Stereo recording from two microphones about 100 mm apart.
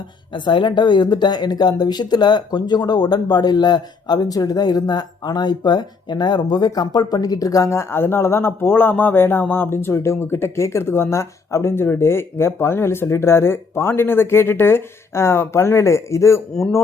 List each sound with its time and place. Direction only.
0.3 s speech: 50° left (ahead or behind); by 16.4 s 30° left (ahead or behind)